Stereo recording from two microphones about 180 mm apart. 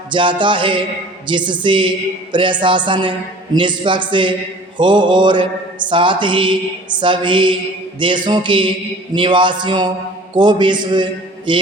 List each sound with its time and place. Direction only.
0.1 s mantra: 25° right (ahead or behind)